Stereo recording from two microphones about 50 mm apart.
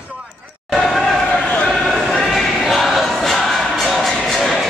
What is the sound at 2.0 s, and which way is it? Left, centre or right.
Music, centre.